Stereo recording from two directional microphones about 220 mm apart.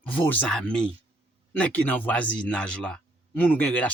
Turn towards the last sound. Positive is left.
turn(degrees=5)  # may be behind; listen again after turning